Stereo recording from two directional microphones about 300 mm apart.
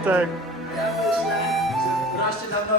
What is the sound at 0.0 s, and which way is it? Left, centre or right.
Speech, centre.